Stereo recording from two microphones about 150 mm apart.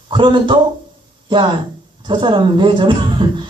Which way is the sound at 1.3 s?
30° right (ahead or behind).